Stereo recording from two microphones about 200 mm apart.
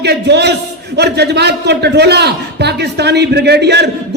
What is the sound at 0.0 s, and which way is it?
A man's voice, 55° right (ahead or behind).